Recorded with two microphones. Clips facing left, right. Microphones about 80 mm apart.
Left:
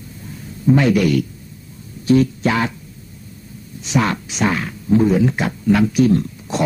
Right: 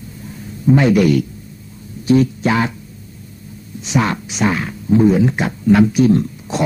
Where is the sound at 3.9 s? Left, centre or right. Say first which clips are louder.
Right 1 dB; centre.